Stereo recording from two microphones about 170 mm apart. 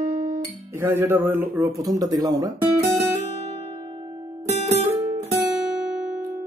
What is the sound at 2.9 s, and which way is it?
Music, 40° right (ahead or behind).